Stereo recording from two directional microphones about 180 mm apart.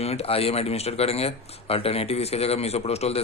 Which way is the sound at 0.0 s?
35° left (ahead or behind).